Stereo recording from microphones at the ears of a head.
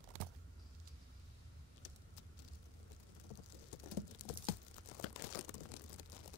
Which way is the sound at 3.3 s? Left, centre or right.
Left.